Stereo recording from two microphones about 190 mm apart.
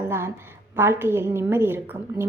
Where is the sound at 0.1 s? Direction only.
10° right (ahead or behind).